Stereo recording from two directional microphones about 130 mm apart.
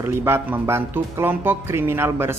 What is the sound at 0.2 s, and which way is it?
A man's voice, 20° right (ahead or behind).